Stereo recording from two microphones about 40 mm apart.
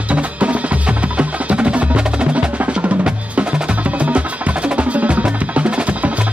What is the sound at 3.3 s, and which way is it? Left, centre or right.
Music, right.